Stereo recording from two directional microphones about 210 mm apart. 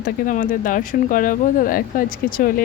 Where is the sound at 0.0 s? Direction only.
40° left (ahead or behind).